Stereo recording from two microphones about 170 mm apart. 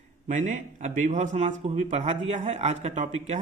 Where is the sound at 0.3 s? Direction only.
45° right (ahead or behind).